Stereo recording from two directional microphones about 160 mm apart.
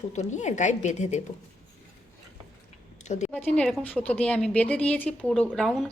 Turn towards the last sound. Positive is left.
turn(degrees=0)  # may be behind; listen again after turning